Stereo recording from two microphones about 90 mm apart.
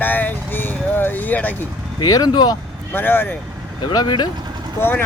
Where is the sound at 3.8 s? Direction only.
60° left (ahead or behind).